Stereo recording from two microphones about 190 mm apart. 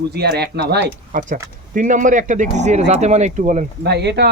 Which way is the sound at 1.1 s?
45° right (ahead or behind).